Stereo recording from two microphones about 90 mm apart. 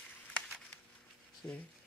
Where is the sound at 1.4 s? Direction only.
45° left (ahead or behind).